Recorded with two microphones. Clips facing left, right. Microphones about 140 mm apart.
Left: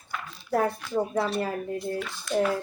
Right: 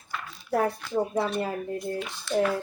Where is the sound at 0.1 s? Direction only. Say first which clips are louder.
Even; centre (ahead or behind).